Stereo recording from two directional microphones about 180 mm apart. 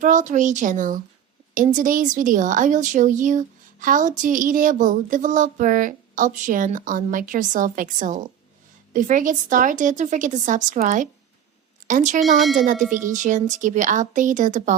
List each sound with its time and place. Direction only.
0.0 s speech: 45° right (ahead or behind)
12.4 s speech: centre (ahead or behind)
12.6 s speech: 45° right (ahead or behind)